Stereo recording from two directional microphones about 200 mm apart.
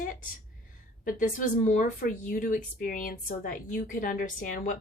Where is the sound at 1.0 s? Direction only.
40° left (ahead or behind).